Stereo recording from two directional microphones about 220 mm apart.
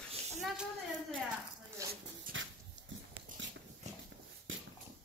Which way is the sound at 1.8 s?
15° right (ahead or behind).